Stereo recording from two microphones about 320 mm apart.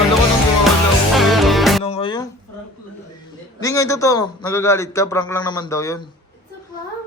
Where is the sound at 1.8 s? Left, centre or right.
Centre.